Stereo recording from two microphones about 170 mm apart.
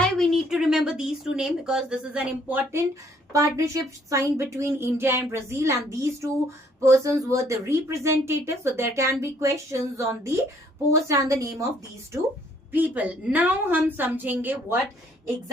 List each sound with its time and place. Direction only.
0.0 s speech: centre (ahead or behind); by 11.5 s 20° right (ahead or behind)
12.7 s speech: 10° right (ahead or behind)